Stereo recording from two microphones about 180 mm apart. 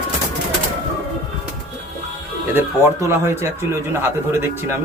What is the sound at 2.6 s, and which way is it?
Speech, 15° right (ahead or behind).